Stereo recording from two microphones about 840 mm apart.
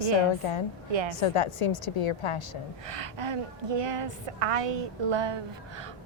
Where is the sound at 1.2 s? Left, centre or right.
Left.